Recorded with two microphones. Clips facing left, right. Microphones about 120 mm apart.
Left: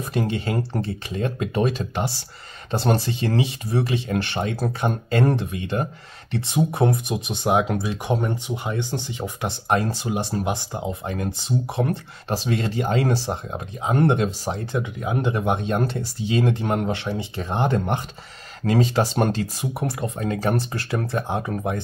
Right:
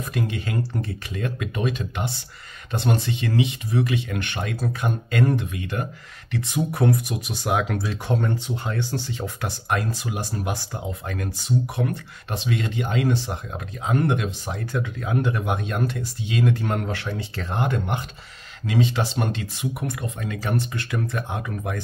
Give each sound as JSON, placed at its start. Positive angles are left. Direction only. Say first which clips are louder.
{"t": 0.0, "sound": "speech", "louder": "left 3 dB", "side_deg": 30}
{"t": 9.7, "sound": "speech", "louder": "left 4 dB", "side_deg": 30}
{"t": 13.5, "sound": "speech", "louder": "right 2 dB", "side_deg": 25}
{"t": 14.8, "sound": "speech", "louder": "right 3 dB", "side_deg": 20}
{"t": 17.6, "sound": "speech", "louder": "left 3 dB", "side_deg": 35}